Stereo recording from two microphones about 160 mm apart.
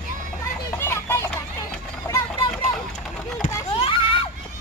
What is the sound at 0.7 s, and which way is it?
Music, 15° left (ahead or behind).